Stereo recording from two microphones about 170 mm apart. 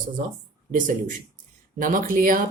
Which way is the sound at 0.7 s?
50° right (ahead or behind).